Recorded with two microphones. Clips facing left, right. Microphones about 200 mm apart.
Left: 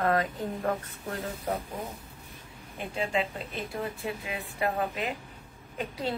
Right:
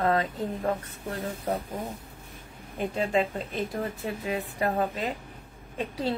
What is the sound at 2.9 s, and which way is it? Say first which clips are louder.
A woman's voice: right 3 dB; 40° right (ahead or behind).